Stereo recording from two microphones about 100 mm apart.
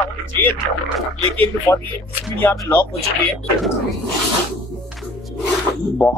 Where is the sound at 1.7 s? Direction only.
25° left (ahead or behind).